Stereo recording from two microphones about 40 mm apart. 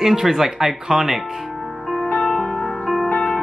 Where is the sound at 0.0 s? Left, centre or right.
Centre.